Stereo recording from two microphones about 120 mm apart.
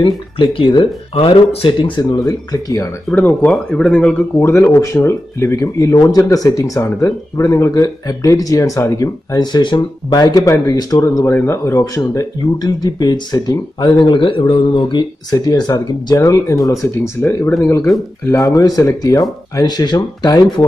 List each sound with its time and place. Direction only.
0.0 s speech: 45° left (ahead or behind); by 2.9 s 30° left (ahead or behind)
3.1 s speech: 10° left (ahead or behind)
4.4 s speech: 25° left (ahead or behind)